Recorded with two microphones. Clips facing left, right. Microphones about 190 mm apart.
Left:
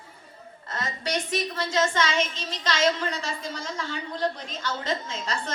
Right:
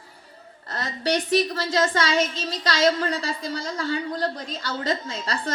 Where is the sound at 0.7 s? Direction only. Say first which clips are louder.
Right 5 dB; 35° right (ahead or behind).